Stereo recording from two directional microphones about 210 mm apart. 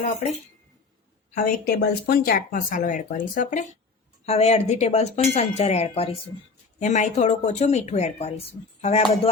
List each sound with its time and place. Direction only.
1.4 s speech: 40° left (ahead or behind)